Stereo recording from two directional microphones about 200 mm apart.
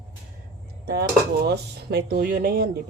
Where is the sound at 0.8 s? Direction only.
55° right (ahead or behind).